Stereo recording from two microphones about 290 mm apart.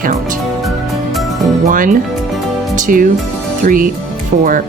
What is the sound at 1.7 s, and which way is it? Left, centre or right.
Speech, right.